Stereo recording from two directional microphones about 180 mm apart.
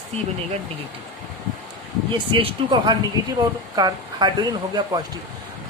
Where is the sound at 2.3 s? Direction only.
30° right (ahead or behind).